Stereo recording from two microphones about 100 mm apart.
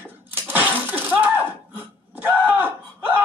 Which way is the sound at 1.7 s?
20° right (ahead or behind).